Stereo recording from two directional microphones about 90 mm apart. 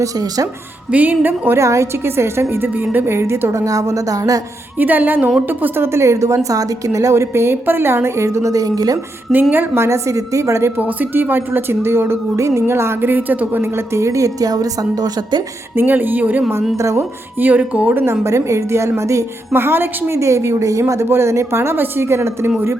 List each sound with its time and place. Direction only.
0.0 s a woman's voice: 45° right (ahead or behind)
0.9 s a woman's voice: 15° right (ahead or behind)
1.5 s a woman's voice: 35° right (ahead or behind)
4.8 s a woman's voice: 20° right (ahead or behind); by 9.0 s 45° right (ahead or behind)
9.3 s a woman's voice: 20° right (ahead or behind)
10.8 s a woman's voice: 20° right (ahead or behind)
13.6 s a woman's voice: 30° right (ahead or behind); by 15.4 s 45° right (ahead or behind)
15.7 s a woman's voice: 20° right (ahead or behind)
16.7 s a woman's voice: 35° right (ahead or behind)
17.4 s a woman's voice: 15° right (ahead or behind)